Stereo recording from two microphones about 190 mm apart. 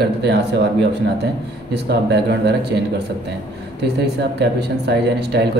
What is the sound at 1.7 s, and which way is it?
Speech, 60° right (ahead or behind).